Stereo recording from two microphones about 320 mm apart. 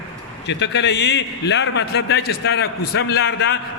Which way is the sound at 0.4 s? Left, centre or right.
Left.